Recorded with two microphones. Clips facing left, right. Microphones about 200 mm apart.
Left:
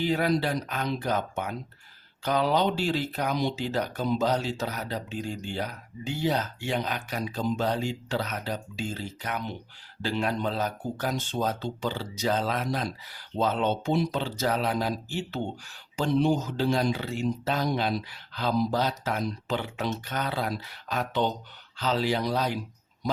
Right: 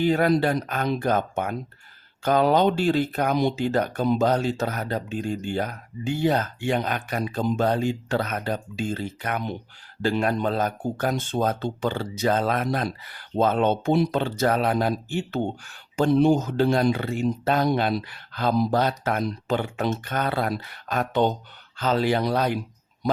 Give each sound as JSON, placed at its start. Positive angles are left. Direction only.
{"t": 0.0, "sound": "speech", "side_deg": -50}